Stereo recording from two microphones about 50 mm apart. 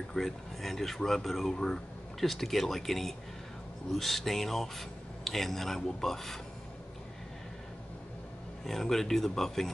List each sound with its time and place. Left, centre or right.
0.1 s speech: centre
8.6 s speech: centre